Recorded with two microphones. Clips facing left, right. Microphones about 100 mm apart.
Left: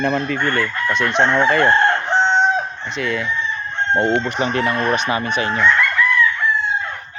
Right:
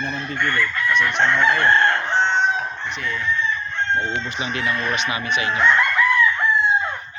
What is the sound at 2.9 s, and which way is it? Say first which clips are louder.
Chicken: left 9 dB; 90° left.